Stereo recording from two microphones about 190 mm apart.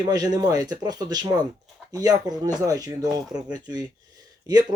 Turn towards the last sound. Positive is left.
turn(degrees=-20)  # may be behind; listen again after turning